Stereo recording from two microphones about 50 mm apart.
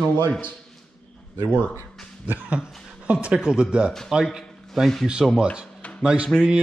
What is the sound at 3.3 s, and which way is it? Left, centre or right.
Speech, centre.